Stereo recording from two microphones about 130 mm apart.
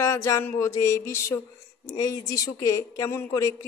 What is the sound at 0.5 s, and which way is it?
A woman's voice, 20° left (ahead or behind).